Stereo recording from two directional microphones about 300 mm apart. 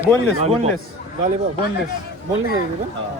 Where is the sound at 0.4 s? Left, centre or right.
Right.